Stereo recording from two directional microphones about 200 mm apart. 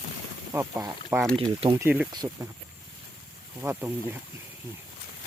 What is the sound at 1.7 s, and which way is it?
Speech, 10° right (ahead or behind).